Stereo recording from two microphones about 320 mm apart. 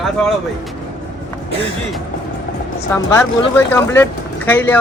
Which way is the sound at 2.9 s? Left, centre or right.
Centre.